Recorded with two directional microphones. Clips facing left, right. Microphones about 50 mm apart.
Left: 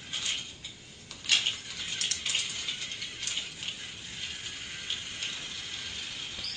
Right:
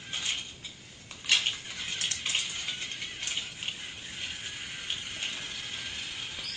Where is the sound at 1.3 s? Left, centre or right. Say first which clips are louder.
Right 1 dB; right.